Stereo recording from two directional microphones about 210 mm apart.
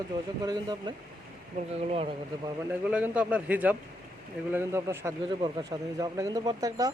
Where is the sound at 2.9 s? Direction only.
5° right (ahead or behind).